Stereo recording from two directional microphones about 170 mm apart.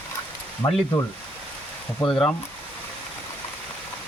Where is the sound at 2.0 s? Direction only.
5° left (ahead or behind).